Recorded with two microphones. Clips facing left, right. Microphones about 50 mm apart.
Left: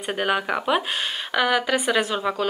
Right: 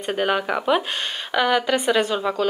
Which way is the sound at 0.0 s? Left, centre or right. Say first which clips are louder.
Right 2 dB; centre.